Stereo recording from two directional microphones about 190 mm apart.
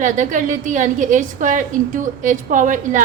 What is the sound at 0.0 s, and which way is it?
A woman's voice, 40° right (ahead or behind).